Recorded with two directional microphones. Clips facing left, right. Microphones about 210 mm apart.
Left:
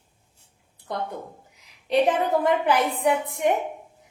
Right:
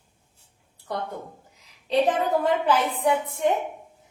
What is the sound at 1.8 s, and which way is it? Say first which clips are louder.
A woman's voice: left 1 dB; 15° left (ahead or behind).